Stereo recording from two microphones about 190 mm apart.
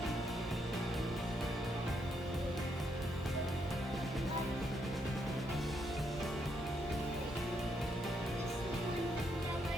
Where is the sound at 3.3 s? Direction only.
Centre (ahead or behind).